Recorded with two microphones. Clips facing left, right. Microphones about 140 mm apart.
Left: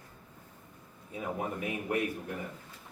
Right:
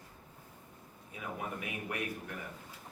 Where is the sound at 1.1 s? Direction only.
30° left (ahead or behind).